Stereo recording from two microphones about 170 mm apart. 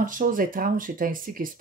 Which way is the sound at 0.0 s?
50° right (ahead or behind).